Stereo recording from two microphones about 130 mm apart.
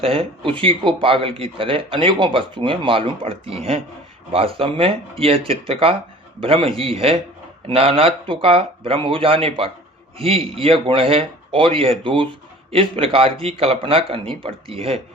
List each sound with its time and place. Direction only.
0.0 s speech: 45° right (ahead or behind)